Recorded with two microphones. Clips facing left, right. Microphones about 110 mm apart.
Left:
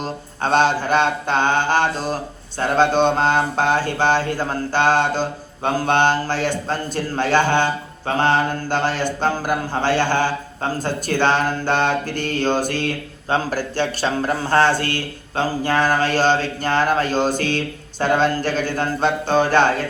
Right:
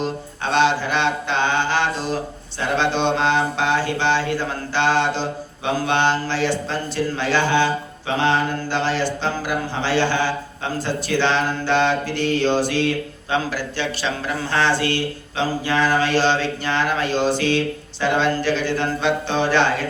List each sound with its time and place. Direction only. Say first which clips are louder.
0.0 s speech: even; 45° left (ahead or behind)